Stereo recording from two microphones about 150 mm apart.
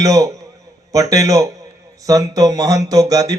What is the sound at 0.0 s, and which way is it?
Speech, 20° right (ahead or behind).